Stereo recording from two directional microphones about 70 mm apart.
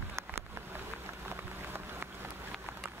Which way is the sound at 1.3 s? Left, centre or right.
Right.